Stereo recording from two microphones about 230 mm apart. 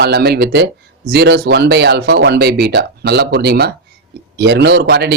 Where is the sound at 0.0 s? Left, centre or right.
Right.